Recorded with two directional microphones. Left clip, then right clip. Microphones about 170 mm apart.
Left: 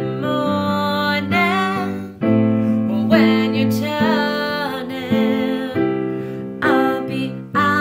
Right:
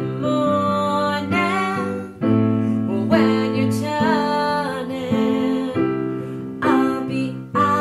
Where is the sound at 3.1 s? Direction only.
5° right (ahead or behind).